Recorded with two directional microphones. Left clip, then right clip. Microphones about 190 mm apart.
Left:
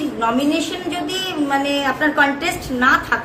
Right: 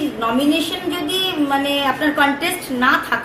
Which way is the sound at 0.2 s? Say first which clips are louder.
Even; centre (ahead or behind).